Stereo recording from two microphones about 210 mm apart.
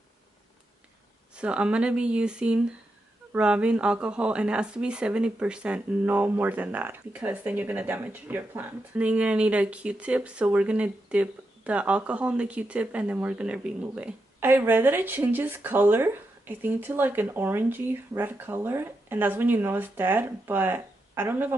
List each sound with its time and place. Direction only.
1.3 s speech: 5° right (ahead or behind)